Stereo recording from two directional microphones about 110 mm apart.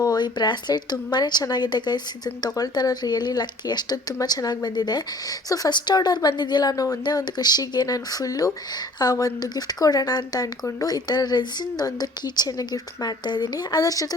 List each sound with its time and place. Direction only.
0.0 s speech: 40° left (ahead or behind)